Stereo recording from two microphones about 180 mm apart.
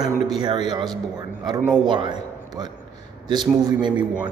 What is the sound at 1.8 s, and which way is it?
A man's voice, 25° right (ahead or behind).